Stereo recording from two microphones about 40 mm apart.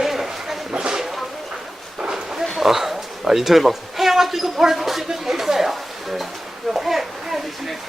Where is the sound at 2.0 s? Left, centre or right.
Centre.